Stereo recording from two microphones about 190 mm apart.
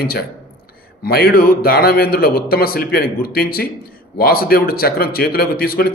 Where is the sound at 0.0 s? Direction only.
55° left (ahead or behind).